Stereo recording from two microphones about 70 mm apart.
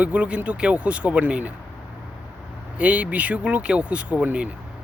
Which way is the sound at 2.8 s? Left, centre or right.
Right.